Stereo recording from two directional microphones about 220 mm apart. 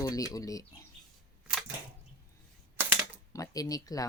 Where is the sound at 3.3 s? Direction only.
15° left (ahead or behind).